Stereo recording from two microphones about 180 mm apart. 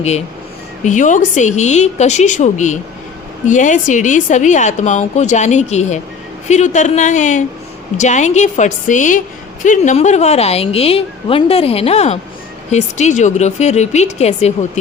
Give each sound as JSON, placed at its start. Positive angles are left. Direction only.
{"t": 0.9, "sound": "a woman's voice", "side_deg": 45}